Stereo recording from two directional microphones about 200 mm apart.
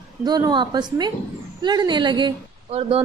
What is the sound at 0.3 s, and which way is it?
A woman's voice, 20° right (ahead or behind).